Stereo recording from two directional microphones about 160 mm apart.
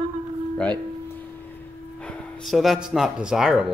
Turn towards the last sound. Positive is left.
turn(degrees=-5)  # may be behind; listen again after turning